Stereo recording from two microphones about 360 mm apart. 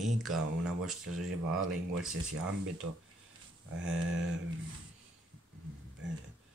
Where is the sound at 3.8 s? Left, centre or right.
Right.